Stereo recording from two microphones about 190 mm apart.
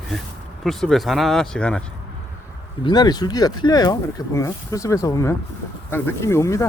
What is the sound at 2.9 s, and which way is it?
Speech, 20° left (ahead or behind).